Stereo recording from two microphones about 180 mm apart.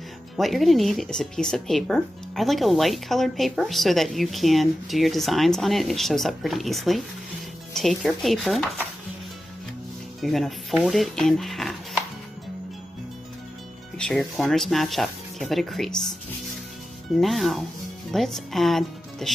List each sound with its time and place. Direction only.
0.4 s speech: centre (ahead or behind)
10.2 s speech: centre (ahead or behind)
13.9 s speech: centre (ahead or behind)
17.1 s speech: centre (ahead or behind)